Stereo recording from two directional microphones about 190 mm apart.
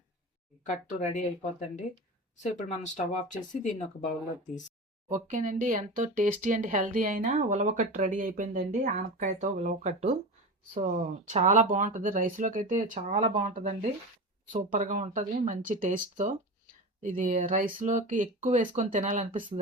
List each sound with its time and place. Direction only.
0.6 s speech: 35° left (ahead or behind)
5.0 s speech: 40° right (ahead or behind)